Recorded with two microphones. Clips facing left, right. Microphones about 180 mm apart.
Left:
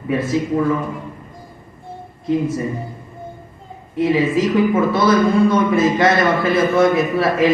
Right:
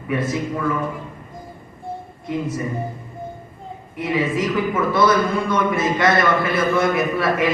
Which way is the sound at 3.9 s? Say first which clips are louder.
Left 5 dB; 25° left (ahead or behind).